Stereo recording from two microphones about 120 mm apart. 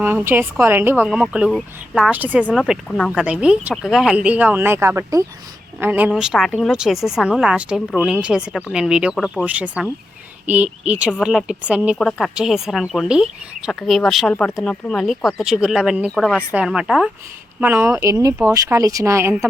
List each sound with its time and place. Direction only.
0.0 s a woman's voice: 15° right (ahead or behind)
17.6 s speech: 15° right (ahead or behind)